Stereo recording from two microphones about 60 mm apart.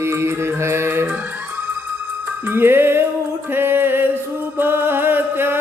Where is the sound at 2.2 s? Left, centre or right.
Right.